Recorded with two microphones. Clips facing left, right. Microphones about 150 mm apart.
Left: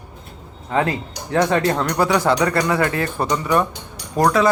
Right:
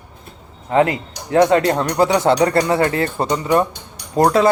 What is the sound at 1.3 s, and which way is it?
A man's voice, 25° right (ahead or behind).